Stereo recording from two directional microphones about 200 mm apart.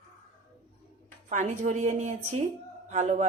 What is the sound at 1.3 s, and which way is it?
Speech, 35° right (ahead or behind).